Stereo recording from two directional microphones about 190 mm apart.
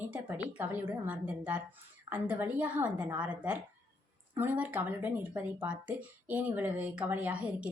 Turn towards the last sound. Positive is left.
turn(degrees=-5)  # may be behind; listen again after turning